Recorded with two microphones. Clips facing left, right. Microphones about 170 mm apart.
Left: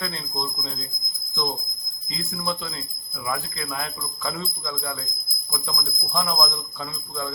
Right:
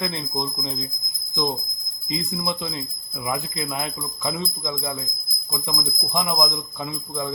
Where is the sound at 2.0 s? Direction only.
20° right (ahead or behind).